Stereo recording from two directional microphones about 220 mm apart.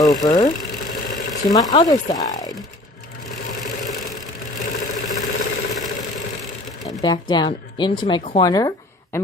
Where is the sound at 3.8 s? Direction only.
Centre (ahead or behind).